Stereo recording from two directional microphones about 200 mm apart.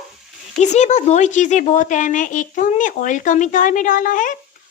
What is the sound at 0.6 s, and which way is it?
A woman's voice, 35° left (ahead or behind).